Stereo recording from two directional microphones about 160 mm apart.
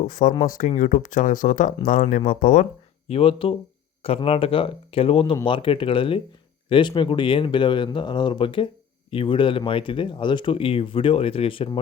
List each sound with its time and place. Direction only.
0.0 s speech: 55° left (ahead or behind)
3.1 s speech: 35° left (ahead or behind)